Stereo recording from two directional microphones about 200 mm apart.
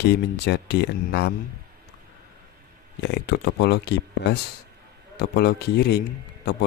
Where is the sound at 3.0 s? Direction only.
55° left (ahead or behind).